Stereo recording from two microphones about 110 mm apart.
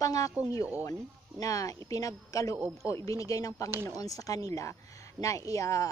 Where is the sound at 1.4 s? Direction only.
30° left (ahead or behind).